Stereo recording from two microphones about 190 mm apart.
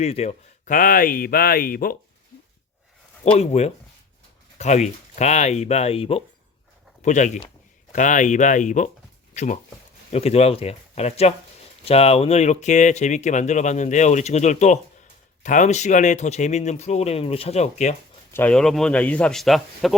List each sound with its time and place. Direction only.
0.0 s speech: 35° left (ahead or behind); by 2.0 s 50° left (ahead or behind)
3.2 s speech: 35° left (ahead or behind)
18.3 s speech: 10° left (ahead or behind)